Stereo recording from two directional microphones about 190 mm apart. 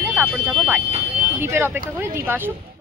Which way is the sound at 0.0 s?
10° right (ahead or behind).